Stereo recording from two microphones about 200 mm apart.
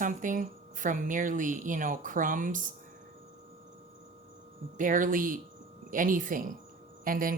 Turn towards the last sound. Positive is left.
turn(degrees=-45)  # may be behind; listen again after turning